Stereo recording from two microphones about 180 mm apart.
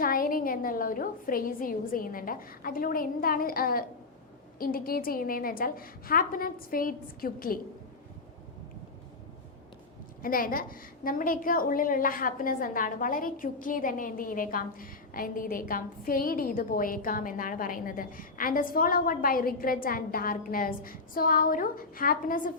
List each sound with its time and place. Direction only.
0.0 s a woman's voice: 50° left (ahead or behind)
10.2 s a woman's voice: 50° left (ahead or behind)